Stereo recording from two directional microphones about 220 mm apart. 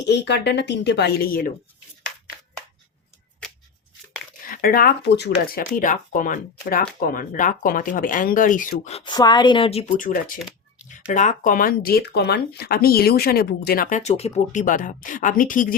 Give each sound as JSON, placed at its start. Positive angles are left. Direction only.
{"t": 0.0, "sound": "a woman's voice", "side_deg": 50}
{"t": 3.4, "sound": "shuffling cards", "side_deg": 5}
{"t": 4.4, "sound": "speech", "side_deg": 40}